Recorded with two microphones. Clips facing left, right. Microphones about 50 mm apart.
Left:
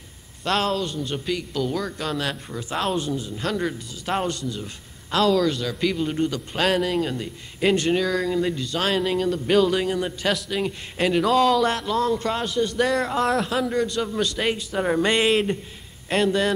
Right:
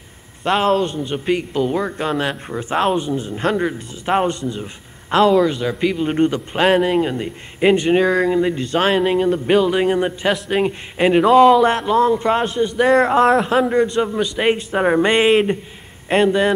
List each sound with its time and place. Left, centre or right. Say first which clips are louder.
0.4 s a man's voice: right 7 dB; right
6.0 s a man's voice: right 7 dB; right
6.5 s speech: right 6 dB; right
7.9 s a man's voice: right 7 dB; right
9.8 s a man's voice: right 6 dB; right
12.6 s speech: right 6 dB; centre
12.9 s a man's voice: right 9 dB; right
14.5 s speech: right 7 dB; right